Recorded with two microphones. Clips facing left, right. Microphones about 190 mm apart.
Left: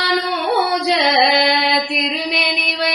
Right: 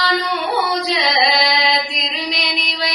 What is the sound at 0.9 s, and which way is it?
Mantra, 60° left (ahead or behind).